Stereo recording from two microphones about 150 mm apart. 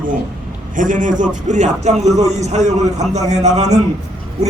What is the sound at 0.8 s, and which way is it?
A man's voice, 60° right (ahead or behind).